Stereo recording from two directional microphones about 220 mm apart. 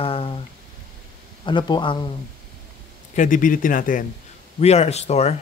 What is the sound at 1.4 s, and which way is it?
Speech, 20° left (ahead or behind).